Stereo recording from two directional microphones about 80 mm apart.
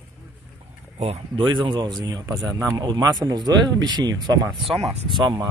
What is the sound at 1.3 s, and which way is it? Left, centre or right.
Speech, right.